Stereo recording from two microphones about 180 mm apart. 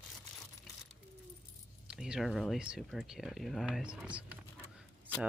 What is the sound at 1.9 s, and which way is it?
Speech, 5° right (ahead or behind).